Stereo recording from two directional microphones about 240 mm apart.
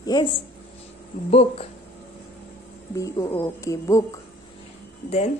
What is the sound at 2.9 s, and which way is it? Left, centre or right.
Speech, centre.